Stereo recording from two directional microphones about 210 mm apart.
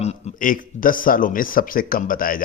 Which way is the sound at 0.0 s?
35° left (ahead or behind).